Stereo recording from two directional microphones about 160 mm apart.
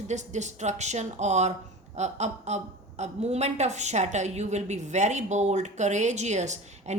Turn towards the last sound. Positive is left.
turn(degrees=-45)  # may be behind; listen again after turning